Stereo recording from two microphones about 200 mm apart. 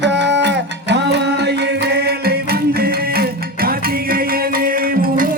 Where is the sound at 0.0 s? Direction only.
60° right (ahead or behind).